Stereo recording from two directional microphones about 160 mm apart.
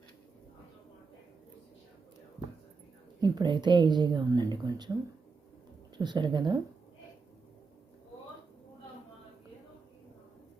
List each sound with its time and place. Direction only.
3.2 s a woman's voice: 30° right (ahead or behind)
6.0 s a woman's voice: 25° right (ahead or behind)